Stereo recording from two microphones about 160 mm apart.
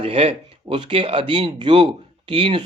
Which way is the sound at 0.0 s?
35° right (ahead or behind).